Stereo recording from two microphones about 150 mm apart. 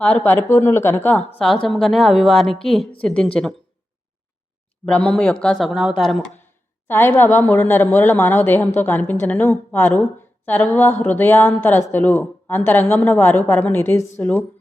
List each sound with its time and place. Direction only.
0.0 s speech: 10° left (ahead or behind)
4.9 s speech: 10° left (ahead or behind)
6.4 s speech: 15° left (ahead or behind)